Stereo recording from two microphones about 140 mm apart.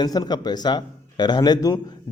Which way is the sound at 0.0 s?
30° left (ahead or behind).